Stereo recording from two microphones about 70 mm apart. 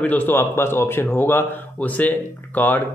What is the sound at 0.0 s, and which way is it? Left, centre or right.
Speech, left.